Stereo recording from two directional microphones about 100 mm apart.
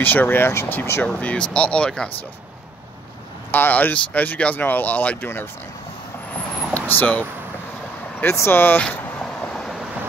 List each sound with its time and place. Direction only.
0.0 s speech: 20° left (ahead or behind)
1.0 s speech: 10° left (ahead or behind)
3.5 s speech: 20° left (ahead or behind)
6.9 s speech: 15° left (ahead or behind)
8.8 s vehicle: 15° left (ahead or behind)